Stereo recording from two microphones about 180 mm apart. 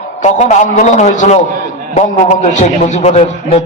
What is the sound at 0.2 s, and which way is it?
A man's voice, 40° left (ahead or behind).